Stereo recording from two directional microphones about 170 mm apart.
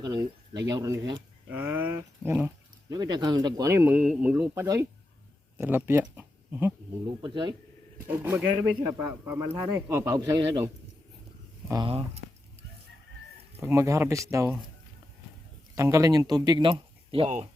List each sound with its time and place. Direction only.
0.0 s speech: 20° right (ahead or behind)
2.9 s speech: 25° right (ahead or behind)
7.2 s speech: 25° right (ahead or behind)
8.0 s speech: 10° right (ahead or behind)
11.9 s speech: 35° right (ahead or behind)
13.6 s speech: 15° right (ahead or behind)
15.7 s speech: 20° right (ahead or behind); by 17.5 s 40° right (ahead or behind)